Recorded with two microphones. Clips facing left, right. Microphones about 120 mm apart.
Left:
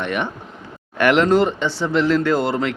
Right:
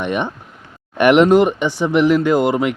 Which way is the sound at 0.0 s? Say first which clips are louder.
Right 3 dB; 20° right (ahead or behind).